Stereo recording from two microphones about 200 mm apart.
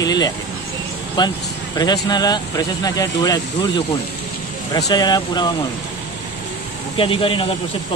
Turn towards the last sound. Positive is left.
turn(degrees=25)  # may be behind; listen again after turning